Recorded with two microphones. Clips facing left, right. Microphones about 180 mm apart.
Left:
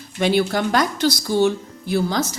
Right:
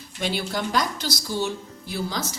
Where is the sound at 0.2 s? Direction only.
60° left (ahead or behind).